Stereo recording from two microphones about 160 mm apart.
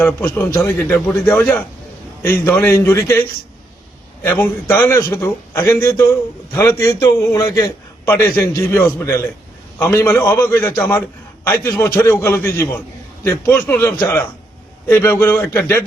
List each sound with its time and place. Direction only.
0.0 s a man's voice: 15° left (ahead or behind)